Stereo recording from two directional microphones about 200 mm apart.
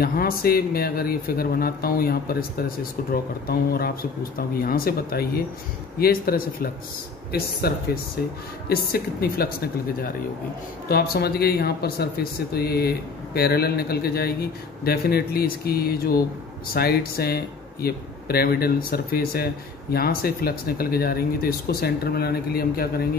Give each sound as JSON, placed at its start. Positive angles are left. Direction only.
{"t": 0.0, "sound": "speech", "side_deg": 50}
{"t": 10.9, "sound": "speech", "side_deg": 50}